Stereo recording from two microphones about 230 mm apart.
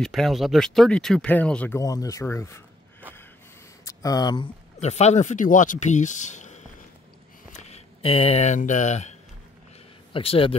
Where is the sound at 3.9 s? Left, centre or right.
Centre.